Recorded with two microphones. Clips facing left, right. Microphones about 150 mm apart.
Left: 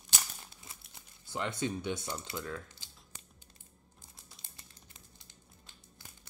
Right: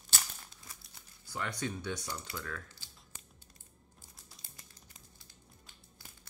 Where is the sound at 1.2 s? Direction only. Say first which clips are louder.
Left 3 dB; 25° left (ahead or behind).